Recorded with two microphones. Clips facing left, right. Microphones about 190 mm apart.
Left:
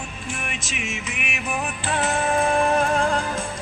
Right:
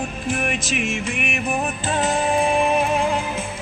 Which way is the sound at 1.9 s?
15° right (ahead or behind).